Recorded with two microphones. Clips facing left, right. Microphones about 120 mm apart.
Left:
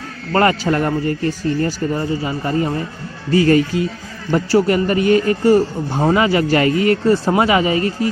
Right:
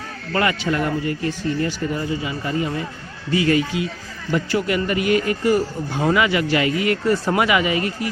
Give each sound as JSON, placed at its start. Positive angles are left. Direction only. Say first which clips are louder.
{"t": 0.3, "sound": "a man's voice", "louder": "left 5 dB", "side_deg": 40}